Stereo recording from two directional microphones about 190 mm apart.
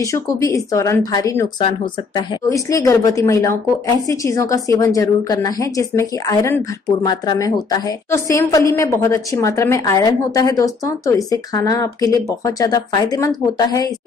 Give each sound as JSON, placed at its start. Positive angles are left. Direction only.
{"t": 0.0, "sound": "a woman's voice", "side_deg": 15}
{"t": 1.6, "sound": "speech", "side_deg": 30}
{"t": 2.5, "sound": "a woman's voice", "side_deg": 15}